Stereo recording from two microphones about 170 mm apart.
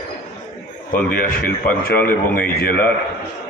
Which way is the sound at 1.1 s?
60° left (ahead or behind).